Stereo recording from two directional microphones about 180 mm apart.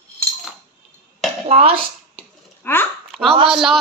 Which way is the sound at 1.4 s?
35° right (ahead or behind).